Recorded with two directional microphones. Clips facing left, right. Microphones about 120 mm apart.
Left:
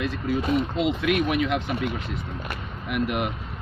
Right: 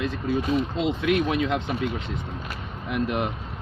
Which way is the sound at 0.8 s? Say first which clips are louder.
Even; 25° right (ahead or behind).